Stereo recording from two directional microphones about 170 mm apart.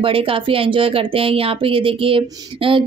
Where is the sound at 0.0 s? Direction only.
30° right (ahead or behind).